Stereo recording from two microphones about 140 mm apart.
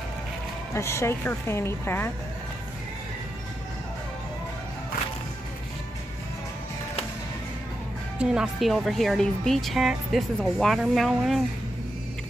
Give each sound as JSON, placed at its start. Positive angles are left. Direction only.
{"t": 0.7, "sound": "a woman's voice", "side_deg": 20}
{"t": 8.2, "sound": "speech", "side_deg": -5}